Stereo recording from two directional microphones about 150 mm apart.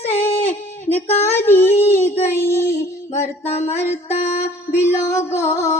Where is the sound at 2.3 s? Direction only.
15° left (ahead or behind).